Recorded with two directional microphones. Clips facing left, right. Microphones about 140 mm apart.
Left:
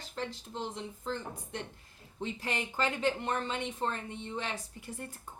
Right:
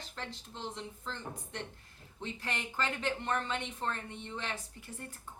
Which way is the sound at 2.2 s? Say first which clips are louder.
Left 4 dB; 15° left (ahead or behind).